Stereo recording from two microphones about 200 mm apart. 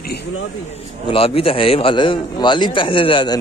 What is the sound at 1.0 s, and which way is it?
A man's voice, 30° left (ahead or behind).